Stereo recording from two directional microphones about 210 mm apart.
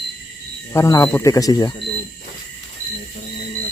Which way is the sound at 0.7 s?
15° left (ahead or behind).